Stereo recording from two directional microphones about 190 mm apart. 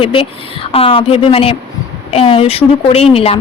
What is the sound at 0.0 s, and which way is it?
A woman's voice, 30° left (ahead or behind).